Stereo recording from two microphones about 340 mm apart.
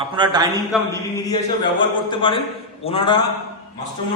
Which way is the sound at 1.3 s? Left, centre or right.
Centre.